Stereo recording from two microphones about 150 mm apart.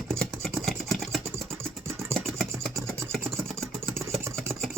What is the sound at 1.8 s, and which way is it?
Vehicle, 15° right (ahead or behind).